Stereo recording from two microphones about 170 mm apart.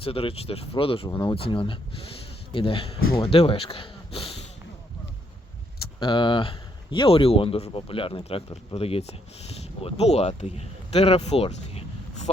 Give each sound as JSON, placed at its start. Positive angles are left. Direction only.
{"t": 0.0, "sound": "speech", "side_deg": 35}
{"t": 6.0, "sound": "speech", "side_deg": 30}